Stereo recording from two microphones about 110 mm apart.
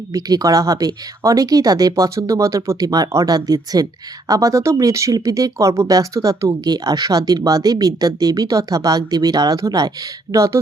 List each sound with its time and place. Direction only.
0.1 s speech: 35° right (ahead or behind)